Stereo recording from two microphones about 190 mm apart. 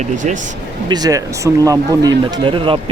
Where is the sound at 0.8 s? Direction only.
20° right (ahead or behind).